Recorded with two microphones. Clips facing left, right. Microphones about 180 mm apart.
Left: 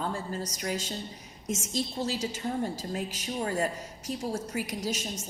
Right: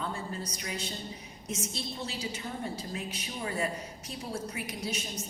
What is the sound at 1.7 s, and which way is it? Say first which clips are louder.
Speech: left 7 dB; 40° left (ahead or behind).